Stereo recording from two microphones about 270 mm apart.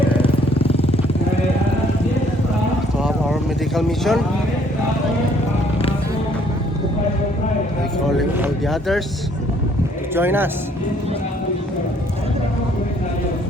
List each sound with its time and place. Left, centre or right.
0.7 s vehicle: left
3.8 s speech: centre
8.4 s speech: centre
10.2 s speech: centre